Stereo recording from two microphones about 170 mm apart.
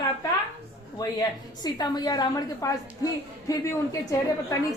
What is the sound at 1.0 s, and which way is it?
A woman's voice, 20° left (ahead or behind).